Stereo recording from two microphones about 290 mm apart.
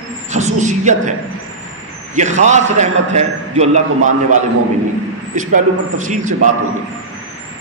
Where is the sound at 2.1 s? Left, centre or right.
Right.